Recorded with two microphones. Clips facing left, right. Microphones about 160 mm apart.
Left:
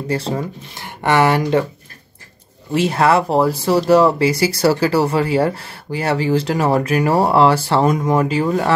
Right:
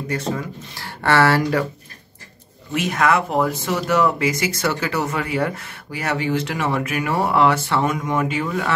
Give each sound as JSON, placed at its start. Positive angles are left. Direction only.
{"t": 0.1, "sound": "speech", "side_deg": 30}
{"t": 0.8, "sound": "speech", "side_deg": 15}
{"t": 2.7, "sound": "speech", "side_deg": 30}